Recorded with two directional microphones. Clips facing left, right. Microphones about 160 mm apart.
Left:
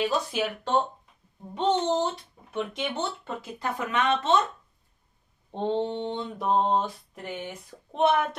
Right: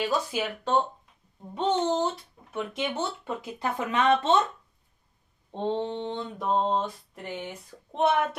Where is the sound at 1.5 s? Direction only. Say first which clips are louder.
Left 1 dB; centre (ahead or behind).